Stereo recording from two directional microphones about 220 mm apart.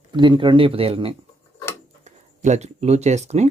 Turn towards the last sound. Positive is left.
turn(degrees=-30)  # may be behind; listen again after turning